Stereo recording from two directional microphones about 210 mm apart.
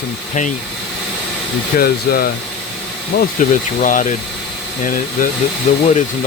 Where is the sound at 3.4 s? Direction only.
35° left (ahead or behind).